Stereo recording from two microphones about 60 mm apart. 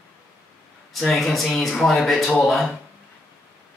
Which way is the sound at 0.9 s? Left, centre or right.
Centre.